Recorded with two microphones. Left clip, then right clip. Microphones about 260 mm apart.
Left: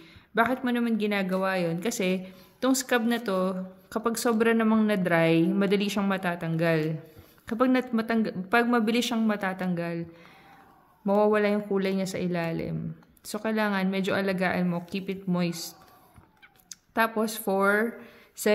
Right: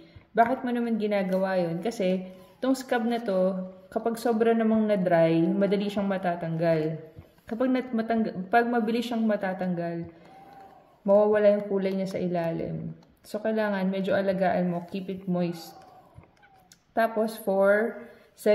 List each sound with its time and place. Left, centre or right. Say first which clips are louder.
0.3 s speech: right 2 dB; left
11.1 s speech: right 3 dB; left
16.9 s speech: right 1 dB; left